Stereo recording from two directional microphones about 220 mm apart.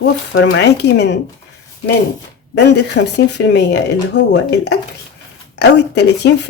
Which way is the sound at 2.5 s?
50° left (ahead or behind).